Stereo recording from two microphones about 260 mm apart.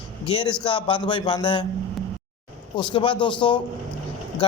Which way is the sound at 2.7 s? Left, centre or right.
Centre.